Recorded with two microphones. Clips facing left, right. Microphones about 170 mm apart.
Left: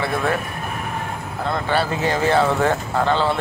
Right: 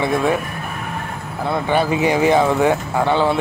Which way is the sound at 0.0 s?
15° right (ahead or behind).